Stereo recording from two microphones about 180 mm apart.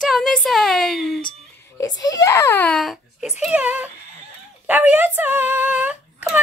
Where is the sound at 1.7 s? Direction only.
20° left (ahead or behind).